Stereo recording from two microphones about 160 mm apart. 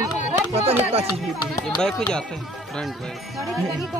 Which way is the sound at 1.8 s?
5° left (ahead or behind).